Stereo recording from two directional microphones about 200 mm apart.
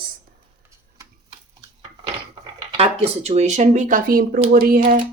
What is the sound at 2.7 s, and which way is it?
Speech, 30° right (ahead or behind).